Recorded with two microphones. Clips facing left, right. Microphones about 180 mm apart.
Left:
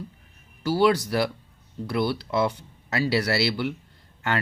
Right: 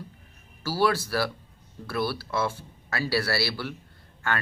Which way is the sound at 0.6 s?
20° left (ahead or behind).